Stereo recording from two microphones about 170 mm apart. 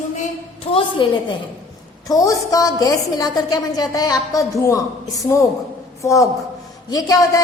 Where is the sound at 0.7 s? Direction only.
30° left (ahead or behind).